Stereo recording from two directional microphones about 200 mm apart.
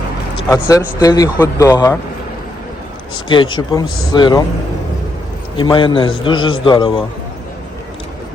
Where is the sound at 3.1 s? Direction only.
25° left (ahead or behind).